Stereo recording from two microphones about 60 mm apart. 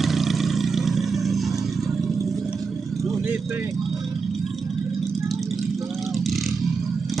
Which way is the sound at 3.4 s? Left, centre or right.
Right.